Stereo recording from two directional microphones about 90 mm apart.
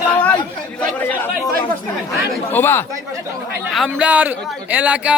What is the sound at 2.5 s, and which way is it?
Speech, 25° left (ahead or behind).